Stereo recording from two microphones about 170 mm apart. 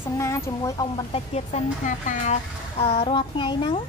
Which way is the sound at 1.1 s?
40° left (ahead or behind).